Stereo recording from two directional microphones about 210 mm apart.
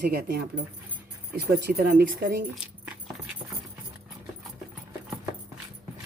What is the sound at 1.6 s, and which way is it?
Speech, 45° right (ahead or behind).